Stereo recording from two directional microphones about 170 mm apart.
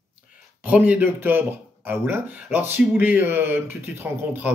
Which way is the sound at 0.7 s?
10° right (ahead or behind).